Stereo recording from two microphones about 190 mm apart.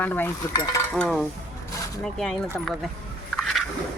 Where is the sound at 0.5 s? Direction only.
20° left (ahead or behind).